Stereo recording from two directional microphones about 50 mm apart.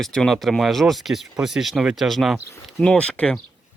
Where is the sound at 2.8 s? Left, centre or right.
Left.